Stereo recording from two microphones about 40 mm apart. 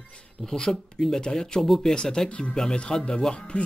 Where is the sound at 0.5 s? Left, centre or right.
Centre.